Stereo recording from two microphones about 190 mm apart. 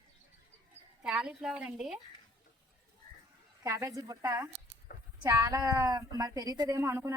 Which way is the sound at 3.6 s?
15° right (ahead or behind).